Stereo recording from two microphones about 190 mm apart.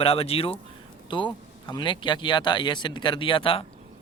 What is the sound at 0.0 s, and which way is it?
Speech, 30° left (ahead or behind).